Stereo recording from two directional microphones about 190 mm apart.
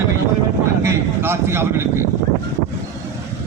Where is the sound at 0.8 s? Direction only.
15° right (ahead or behind).